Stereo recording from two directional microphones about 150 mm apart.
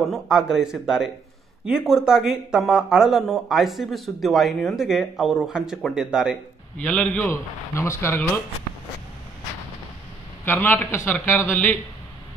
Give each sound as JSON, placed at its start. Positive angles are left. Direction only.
{"t": 0.1, "sound": "speech", "side_deg": -5}
{"t": 6.8, "sound": "speech", "side_deg": 10}
{"t": 10.4, "sound": "speech", "side_deg": 15}